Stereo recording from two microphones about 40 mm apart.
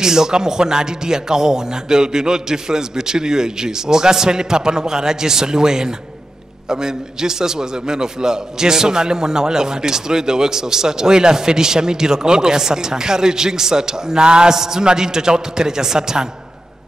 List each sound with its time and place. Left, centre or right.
0.0 s a man's voice: centre